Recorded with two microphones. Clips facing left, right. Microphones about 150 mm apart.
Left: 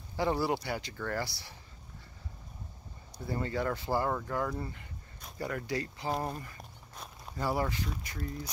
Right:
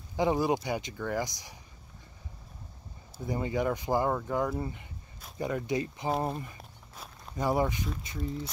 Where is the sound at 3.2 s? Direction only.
15° right (ahead or behind).